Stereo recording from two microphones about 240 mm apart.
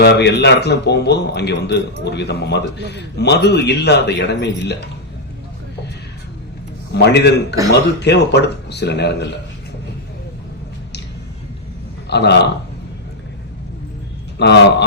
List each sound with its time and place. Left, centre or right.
0.0 s a man's voice: left
6.9 s a man's voice: left
12.0 s a man's voice: left
14.3 s a man's voice: left